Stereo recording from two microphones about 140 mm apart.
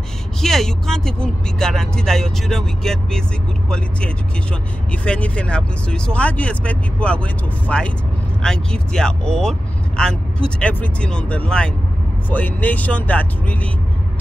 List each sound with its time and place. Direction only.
0.4 s speech: 5° left (ahead or behind)
5.0 s speech: 10° left (ahead or behind)